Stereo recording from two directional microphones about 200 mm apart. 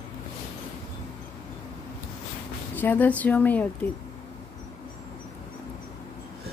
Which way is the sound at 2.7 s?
10° left (ahead or behind).